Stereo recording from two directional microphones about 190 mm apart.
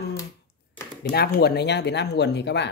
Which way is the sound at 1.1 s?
55° left (ahead or behind).